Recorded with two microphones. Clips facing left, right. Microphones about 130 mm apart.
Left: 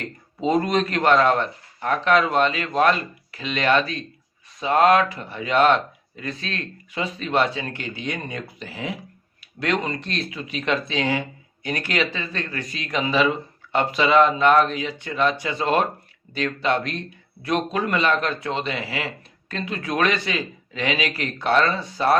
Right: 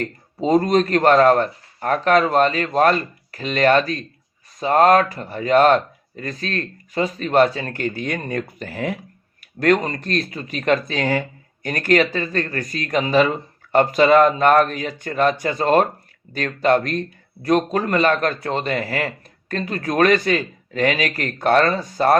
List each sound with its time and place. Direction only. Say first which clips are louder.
0.0 s a man's voice: right 2 dB; 35° right (ahead or behind)